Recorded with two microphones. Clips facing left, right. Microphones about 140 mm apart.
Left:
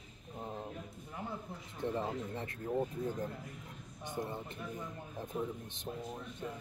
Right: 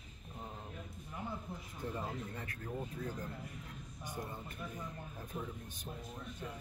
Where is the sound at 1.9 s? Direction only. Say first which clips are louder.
Left 4 dB; 25° left (ahead or behind).